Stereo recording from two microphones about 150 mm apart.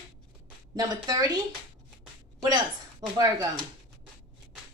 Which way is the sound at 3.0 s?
25° right (ahead or behind).